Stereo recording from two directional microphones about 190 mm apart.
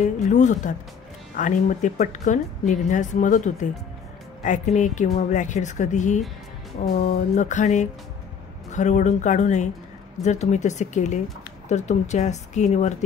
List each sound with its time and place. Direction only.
0.0 s speech: 40° left (ahead or behind)